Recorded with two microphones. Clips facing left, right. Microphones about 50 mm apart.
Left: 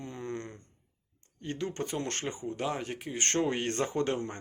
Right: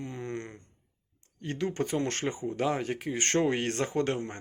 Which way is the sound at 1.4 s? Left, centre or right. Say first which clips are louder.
Right 3 dB; right.